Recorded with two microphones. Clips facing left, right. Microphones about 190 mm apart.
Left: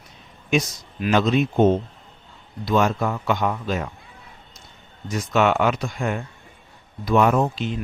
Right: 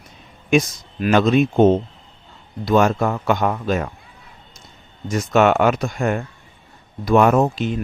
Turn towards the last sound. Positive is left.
turn(degrees=-50)  # may be behind; listen again after turning